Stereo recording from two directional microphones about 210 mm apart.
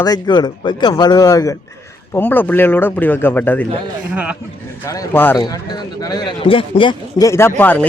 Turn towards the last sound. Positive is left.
turn(degrees=10)  # may be behind; listen again after turning